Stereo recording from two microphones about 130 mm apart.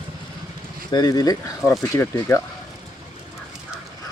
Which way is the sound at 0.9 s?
30° left (ahead or behind).